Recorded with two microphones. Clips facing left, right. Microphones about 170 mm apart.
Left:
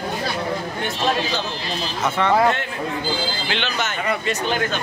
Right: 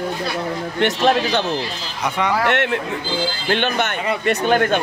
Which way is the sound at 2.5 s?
75° right (ahead or behind).